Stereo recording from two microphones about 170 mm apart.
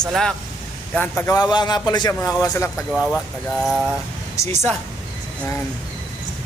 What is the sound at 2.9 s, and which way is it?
Speech, centre (ahead or behind).